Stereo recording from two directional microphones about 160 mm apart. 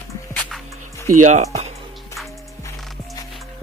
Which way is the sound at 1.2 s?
45° right (ahead or behind).